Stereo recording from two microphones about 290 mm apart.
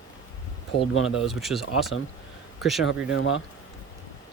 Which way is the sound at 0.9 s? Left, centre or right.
Left.